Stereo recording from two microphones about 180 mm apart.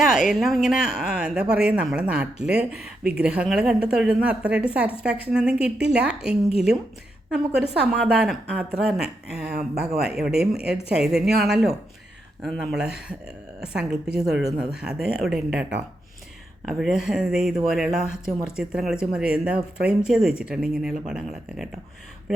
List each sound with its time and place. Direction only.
0.0 s a woman's voice: 5° right (ahead or behind)
5.7 s a woman's voice: 70° right (ahead or behind)
7.9 s speech: 5° right (ahead or behind)
9.5 s speech: 60° right (ahead or behind)
10.0 s speech: 5° right (ahead or behind)